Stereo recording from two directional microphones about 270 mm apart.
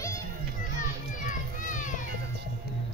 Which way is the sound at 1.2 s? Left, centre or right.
Left.